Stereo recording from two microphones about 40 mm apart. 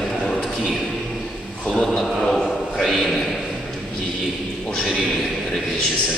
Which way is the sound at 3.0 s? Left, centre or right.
Centre.